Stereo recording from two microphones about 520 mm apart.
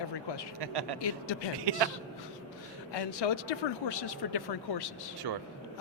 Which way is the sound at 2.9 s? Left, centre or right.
Left.